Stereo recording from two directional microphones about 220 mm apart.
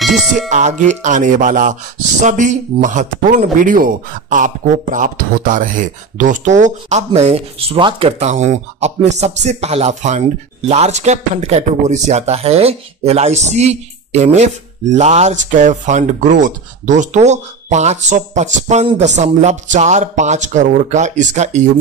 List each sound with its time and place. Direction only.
0.0 s speech: centre (ahead or behind)
0.5 s speech: 35° right (ahead or behind)